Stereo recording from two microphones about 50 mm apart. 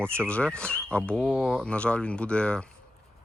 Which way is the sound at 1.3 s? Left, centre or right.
Centre.